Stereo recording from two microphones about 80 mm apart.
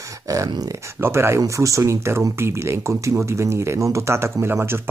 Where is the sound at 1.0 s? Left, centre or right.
Right.